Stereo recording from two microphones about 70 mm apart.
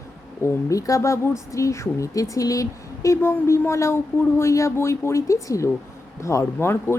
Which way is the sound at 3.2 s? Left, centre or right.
Left.